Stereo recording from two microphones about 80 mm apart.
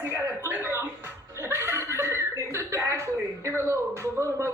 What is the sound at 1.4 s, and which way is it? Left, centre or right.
Chuckle, right.